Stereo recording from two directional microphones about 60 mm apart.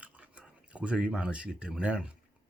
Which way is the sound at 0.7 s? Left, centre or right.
Centre.